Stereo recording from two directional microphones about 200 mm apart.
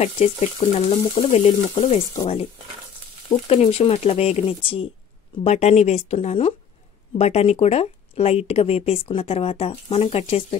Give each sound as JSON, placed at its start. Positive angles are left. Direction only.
{"t": 0.0, "sound": "speech", "side_deg": 30}
{"t": 3.3, "sound": "speech", "side_deg": 30}